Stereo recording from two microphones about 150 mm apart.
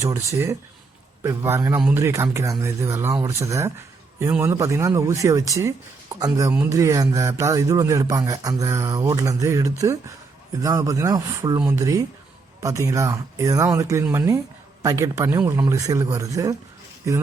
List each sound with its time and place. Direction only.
1.2 s speech: 20° right (ahead or behind)